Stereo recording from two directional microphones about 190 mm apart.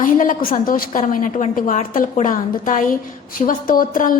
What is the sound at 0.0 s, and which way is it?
A woman's voice, 45° left (ahead or behind).